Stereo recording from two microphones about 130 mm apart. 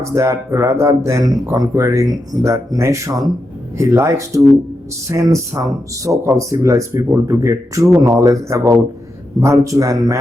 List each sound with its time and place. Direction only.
0.0 s speech: 20° right (ahead or behind)